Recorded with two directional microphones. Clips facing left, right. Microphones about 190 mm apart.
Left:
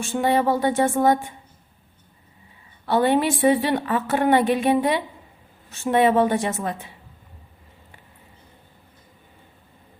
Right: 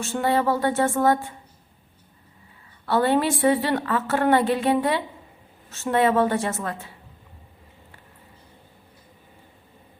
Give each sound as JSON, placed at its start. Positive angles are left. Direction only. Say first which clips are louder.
{"t": 0.0, "sound": "a woman's voice", "louder": "left 2 dB", "side_deg": 15}
{"t": 2.8, "sound": "a woman's voice", "louder": "left 1 dB", "side_deg": 15}